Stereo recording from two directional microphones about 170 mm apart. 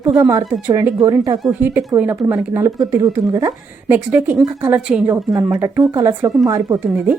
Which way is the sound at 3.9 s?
10° right (ahead or behind).